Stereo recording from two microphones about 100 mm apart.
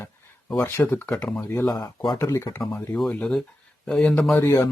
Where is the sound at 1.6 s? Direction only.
45° left (ahead or behind).